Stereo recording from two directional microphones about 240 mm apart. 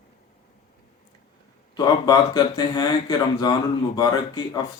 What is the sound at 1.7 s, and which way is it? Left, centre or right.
Speech, centre.